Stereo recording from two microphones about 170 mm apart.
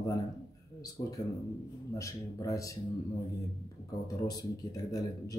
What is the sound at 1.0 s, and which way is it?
Speech, 25° left (ahead or behind).